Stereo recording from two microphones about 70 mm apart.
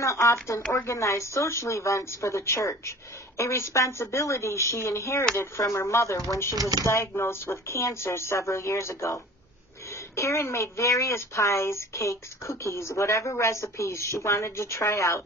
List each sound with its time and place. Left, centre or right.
0.0 s a woman's voice: left
6.5 s speech: right
6.8 s a woman's voice: left